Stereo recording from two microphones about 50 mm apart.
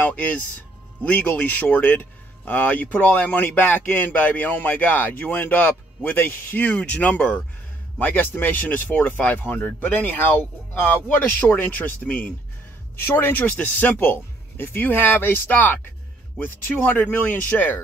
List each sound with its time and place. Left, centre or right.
0.0 s speech: left
9.6 s speech: left